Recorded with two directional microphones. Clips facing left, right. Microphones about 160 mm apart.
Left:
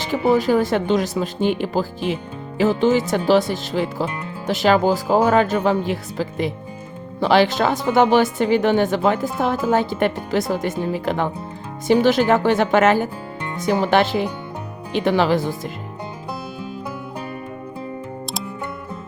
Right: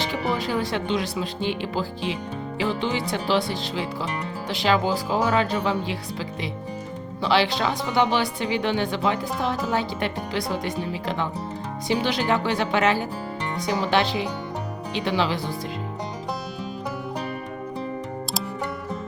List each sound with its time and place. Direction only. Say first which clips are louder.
0.1 s speech: left 9 dB; 45° left (ahead or behind)